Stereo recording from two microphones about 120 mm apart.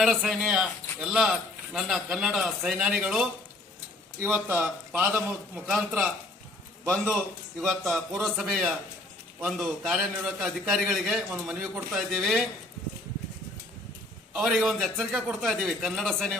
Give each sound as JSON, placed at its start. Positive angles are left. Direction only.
{"t": 0.0, "sound": "a man's voice", "side_deg": 0}
{"t": 4.2, "sound": "speech", "side_deg": -20}
{"t": 7.6, "sound": "a man's voice", "side_deg": 0}
{"t": 14.3, "sound": "a man's voice", "side_deg": 0}